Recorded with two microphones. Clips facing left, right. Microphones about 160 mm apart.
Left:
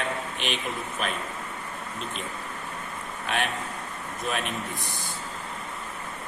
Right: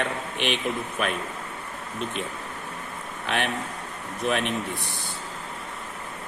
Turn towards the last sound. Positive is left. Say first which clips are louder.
# right 4 dB
turn(degrees=-60)  # may be behind; listen again after turning